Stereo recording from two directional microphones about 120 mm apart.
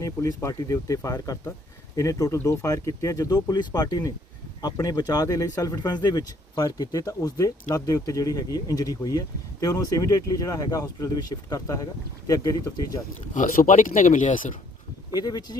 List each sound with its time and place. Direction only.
0.0 s speech: 25° left (ahead or behind)
13.3 s speech: 90° left
15.1 s speech: 30° left (ahead or behind)